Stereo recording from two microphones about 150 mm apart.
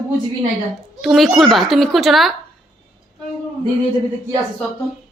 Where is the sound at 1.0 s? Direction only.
Centre (ahead or behind).